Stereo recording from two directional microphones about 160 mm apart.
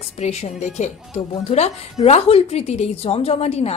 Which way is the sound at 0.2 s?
45° left (ahead or behind).